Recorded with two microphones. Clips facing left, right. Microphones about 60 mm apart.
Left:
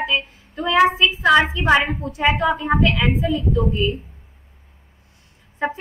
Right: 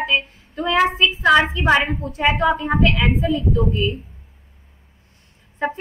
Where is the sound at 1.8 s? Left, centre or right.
Left.